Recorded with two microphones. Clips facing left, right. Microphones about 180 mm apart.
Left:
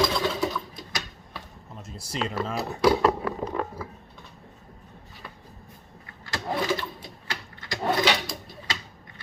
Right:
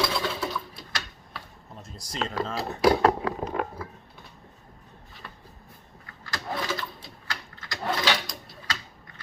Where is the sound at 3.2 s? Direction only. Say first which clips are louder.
Even; 90° right.